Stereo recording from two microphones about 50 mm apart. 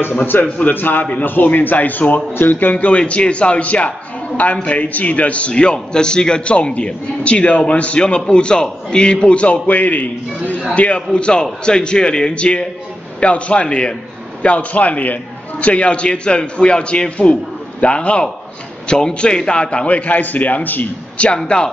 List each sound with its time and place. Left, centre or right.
0.1 s a man's voice: left
21.4 s a man's voice: centre